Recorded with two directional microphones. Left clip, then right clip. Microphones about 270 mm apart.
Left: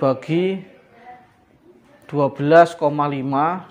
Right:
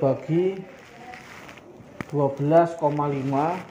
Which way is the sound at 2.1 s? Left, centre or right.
Left.